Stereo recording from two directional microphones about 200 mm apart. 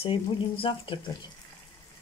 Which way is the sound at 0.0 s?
25° left (ahead or behind).